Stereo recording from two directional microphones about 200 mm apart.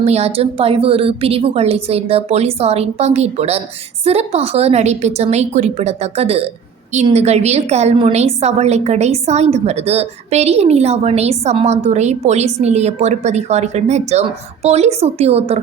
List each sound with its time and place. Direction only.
0.0 s a woman's voice: 30° right (ahead or behind)